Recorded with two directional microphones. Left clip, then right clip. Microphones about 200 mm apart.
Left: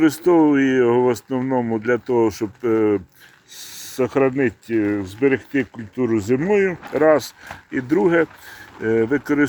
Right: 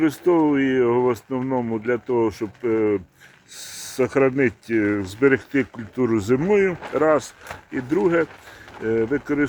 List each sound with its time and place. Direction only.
0.0 s speech: 25° left (ahead or behind)
3.6 s speech: 10° left (ahead or behind); by 9.5 s 30° left (ahead or behind)